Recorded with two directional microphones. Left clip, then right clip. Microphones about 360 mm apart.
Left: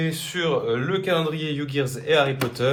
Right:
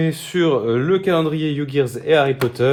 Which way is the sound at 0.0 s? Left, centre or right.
Right.